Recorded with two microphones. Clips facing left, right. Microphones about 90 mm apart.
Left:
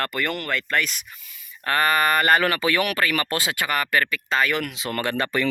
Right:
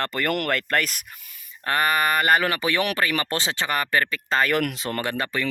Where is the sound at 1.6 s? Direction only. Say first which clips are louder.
Left 1 dB; 20° right (ahead or behind); by 4.8 s 50° right (ahead or behind).